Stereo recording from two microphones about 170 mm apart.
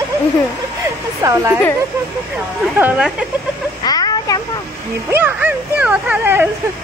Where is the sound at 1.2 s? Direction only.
15° right (ahead or behind).